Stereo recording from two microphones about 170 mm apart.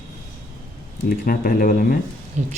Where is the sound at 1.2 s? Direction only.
55° left (ahead or behind).